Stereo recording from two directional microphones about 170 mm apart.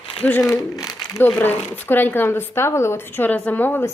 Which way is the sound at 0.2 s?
10° left (ahead or behind).